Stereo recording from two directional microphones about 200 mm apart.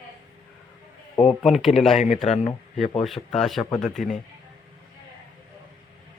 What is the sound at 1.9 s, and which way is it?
Speech, 35° left (ahead or behind).